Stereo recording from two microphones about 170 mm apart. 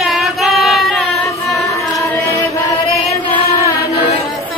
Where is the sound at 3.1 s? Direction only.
25° left (ahead or behind).